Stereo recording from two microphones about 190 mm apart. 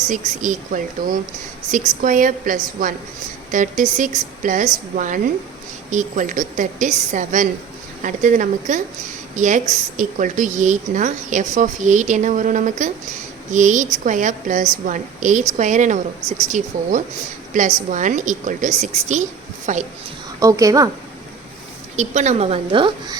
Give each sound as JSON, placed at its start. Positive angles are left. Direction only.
{"t": 0.1, "sound": "a woman's voice", "side_deg": -45}
{"t": 20.4, "sound": "a woman's voice", "side_deg": -15}
{"t": 21.9, "sound": "a woman's voice", "side_deg": -40}